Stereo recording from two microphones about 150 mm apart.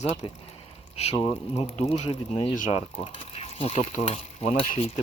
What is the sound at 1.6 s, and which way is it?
Speech, 40° left (ahead or behind).